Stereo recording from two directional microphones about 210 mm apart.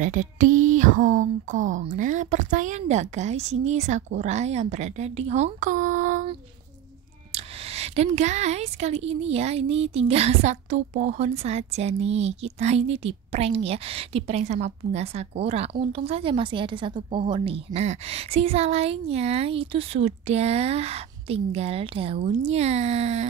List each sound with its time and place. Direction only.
0.0 s speech: 40° right (ahead or behind)
7.3 s a woman's voice: 30° right (ahead or behind)